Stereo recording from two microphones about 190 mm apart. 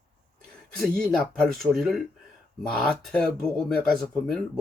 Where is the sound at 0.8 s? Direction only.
5° left (ahead or behind).